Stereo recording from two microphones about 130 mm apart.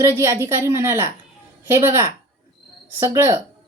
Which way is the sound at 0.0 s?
20° right (ahead or behind).